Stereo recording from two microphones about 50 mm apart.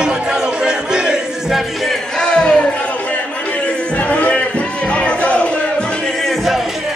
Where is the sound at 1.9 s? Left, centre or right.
Centre.